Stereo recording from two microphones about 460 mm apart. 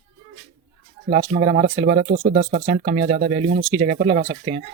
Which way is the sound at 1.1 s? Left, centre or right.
Centre.